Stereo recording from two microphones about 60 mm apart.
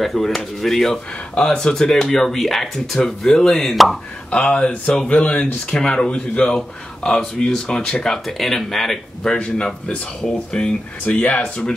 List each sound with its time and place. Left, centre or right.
0.0 s speech: centre
4.3 s speech: left; by 9.3 s centre
9.3 s speech: centre